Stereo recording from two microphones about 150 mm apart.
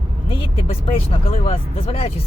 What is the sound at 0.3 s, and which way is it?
Speech, 40° left (ahead or behind).